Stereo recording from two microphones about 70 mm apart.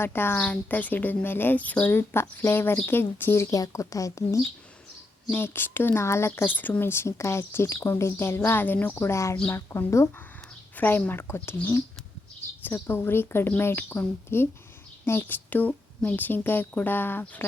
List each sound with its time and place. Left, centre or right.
0.0 s speech: left
0.3 s a woman's voice: left
1.9 s a woman's voice: left
5.3 s speech: left
8.4 s a woman's voice: left
10.8 s a woman's voice: left